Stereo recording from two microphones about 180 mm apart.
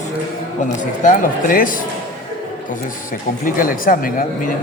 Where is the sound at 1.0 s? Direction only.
50° left (ahead or behind).